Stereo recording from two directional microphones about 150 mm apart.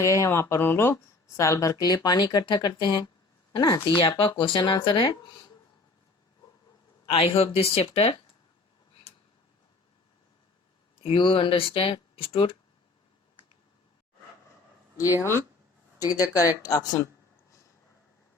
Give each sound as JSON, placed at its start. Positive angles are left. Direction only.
{"t": 0.0, "sound": "speech", "side_deg": 20}
{"t": 7.1, "sound": "speech", "side_deg": 40}
{"t": 11.0, "sound": "speech", "side_deg": 35}
{"t": 15.2, "sound": "speech", "side_deg": 20}